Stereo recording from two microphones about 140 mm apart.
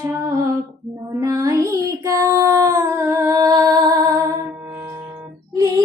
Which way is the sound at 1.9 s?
20° right (ahead or behind).